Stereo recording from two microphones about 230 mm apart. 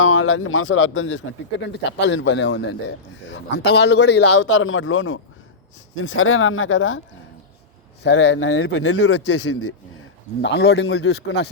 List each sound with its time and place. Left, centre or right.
0.0 s speech: left
4.4 s speech: left
8.0 s speech: left
10.4 s speech: left